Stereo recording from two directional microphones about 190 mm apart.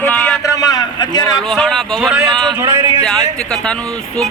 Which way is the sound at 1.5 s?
Centre (ahead or behind).